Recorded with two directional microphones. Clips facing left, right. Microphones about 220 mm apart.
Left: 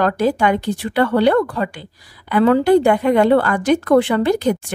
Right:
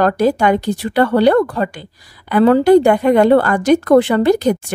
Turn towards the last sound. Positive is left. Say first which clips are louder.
# right 3 dB
turn(degrees=-40)  # may be behind; listen again after turning